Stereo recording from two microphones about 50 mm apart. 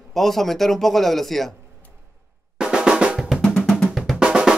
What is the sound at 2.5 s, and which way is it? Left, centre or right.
Drum, centre.